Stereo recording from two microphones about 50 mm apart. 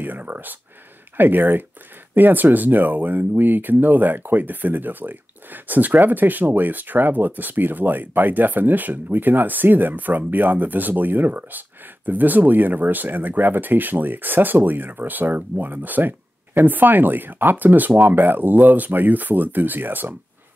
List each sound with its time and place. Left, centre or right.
0.0 s speech: right